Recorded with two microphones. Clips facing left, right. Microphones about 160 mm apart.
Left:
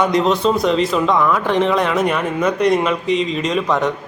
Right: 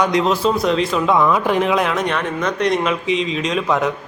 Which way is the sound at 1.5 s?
5° right (ahead or behind).